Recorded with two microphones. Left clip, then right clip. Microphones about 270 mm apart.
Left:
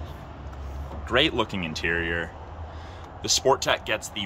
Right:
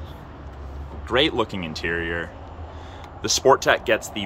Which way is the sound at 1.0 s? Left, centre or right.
Centre.